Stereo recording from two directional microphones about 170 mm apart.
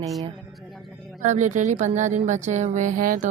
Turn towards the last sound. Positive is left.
turn(degrees=-50)  # may be behind; listen again after turning